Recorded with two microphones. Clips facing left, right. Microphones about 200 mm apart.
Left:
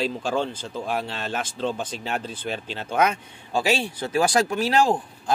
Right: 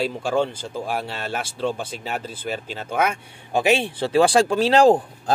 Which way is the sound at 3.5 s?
20° right (ahead or behind).